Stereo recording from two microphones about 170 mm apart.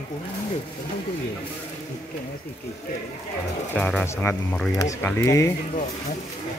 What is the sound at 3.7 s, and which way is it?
Speech, 5° left (ahead or behind).